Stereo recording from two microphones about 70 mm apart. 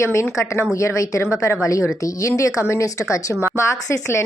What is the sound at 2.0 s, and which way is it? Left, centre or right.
A woman's voice, left.